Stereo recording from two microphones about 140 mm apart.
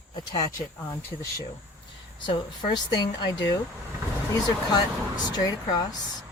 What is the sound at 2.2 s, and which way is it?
A woman's voice, 35° left (ahead or behind).